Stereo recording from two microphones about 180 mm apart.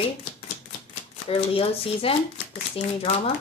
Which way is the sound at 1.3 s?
30° left (ahead or behind).